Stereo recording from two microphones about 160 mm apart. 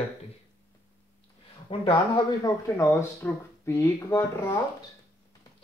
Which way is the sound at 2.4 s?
20° left (ahead or behind).